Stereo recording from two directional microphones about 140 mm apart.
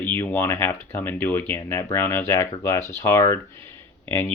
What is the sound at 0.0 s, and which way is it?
Speech, 15° left (ahead or behind).